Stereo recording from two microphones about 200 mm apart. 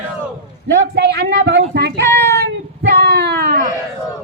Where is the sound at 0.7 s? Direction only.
55° right (ahead or behind).